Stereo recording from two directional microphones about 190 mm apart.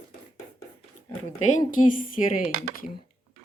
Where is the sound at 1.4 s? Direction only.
40° left (ahead or behind).